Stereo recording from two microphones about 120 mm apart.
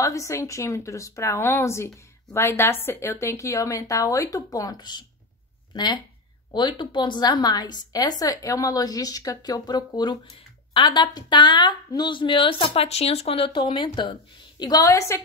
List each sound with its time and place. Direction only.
0.0 s a woman's voice: 25° left (ahead or behind); by 14.1 s 40° left (ahead or behind)
14.6 s speech: 30° left (ahead or behind)